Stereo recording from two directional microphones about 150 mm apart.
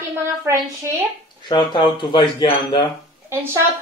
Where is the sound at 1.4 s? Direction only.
30° left (ahead or behind).